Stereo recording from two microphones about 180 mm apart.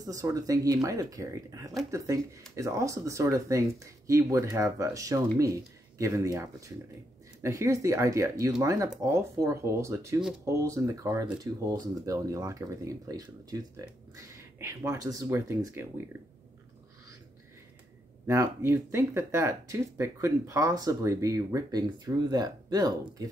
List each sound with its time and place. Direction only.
0.0 s speech: 20° right (ahead or behind)
18.2 s speech: 15° right (ahead or behind)